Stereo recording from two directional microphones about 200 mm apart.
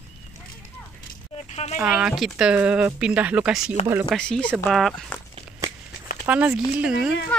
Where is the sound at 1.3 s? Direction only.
30° left (ahead or behind).